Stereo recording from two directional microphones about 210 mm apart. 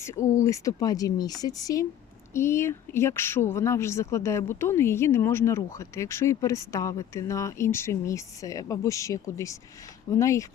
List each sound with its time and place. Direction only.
0.0 s speech: 15° left (ahead or behind)